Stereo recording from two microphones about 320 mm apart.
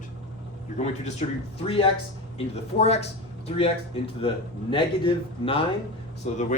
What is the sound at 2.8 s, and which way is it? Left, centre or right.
A man's voice, centre.